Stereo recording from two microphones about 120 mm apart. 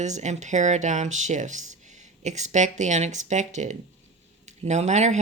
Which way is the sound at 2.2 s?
75° right (ahead or behind).